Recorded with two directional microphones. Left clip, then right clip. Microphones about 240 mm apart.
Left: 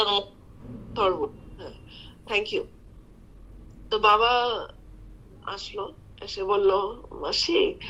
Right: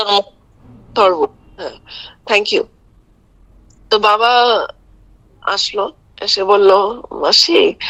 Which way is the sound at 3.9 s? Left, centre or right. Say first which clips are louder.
Right 9 dB; right.